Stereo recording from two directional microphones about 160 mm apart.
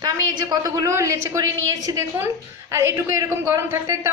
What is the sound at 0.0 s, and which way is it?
A woman's voice, 25° right (ahead or behind).